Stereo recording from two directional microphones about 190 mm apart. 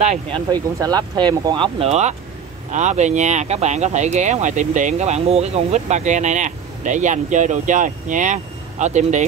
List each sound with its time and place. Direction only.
0.0 s speech: 35° right (ahead or behind)
0.5 s speech: 20° right (ahead or behind); by 9.2 s 40° right (ahead or behind)